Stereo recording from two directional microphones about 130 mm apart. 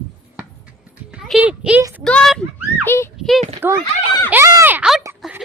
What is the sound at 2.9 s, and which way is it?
Speech, 20° left (ahead or behind).